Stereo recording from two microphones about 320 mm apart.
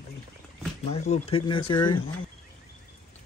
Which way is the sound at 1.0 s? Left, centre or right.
Centre.